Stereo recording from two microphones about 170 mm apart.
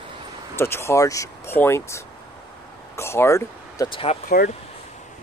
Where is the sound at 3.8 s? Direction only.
35° left (ahead or behind).